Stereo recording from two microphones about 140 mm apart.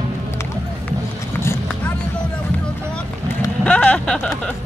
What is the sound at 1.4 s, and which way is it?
Vehicle, 20° left (ahead or behind).